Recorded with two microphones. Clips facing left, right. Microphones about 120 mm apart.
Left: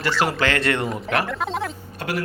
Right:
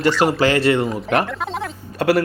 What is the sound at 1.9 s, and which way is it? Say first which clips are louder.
Speech: right 12 dB; 90° right.